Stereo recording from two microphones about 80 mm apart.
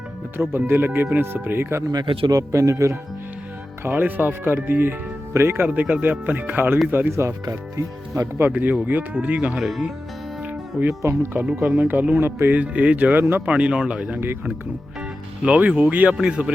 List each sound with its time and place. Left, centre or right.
0.3 s speech: right
1.9 s speech: right
2.3 s speech: right
3.8 s speech: right
5.6 s speech: centre
7.1 s speech: right
8.4 s speech: right
9.6 s speech: centre
10.4 s music: centre
11.0 s speech: right
11.3 s speech: centre
13.5 s speech: centre
15.4 s speech: centre